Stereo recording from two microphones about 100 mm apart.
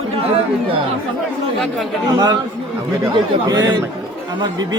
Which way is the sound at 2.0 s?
40° right (ahead or behind).